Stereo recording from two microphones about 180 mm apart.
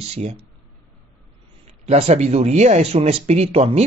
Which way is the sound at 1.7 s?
40° right (ahead or behind).